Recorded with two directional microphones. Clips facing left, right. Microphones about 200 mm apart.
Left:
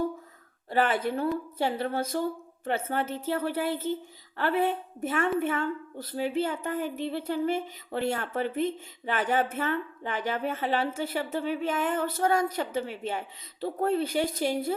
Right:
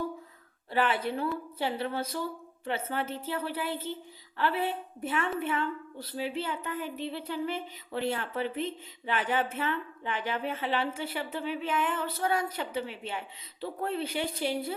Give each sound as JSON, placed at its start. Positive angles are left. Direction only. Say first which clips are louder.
{"t": 0.7, "sound": "a woman's voice", "louder": "left 3 dB", "side_deg": 45}